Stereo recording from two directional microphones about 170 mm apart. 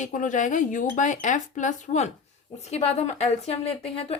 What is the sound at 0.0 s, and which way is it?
Speech, 50° left (ahead or behind).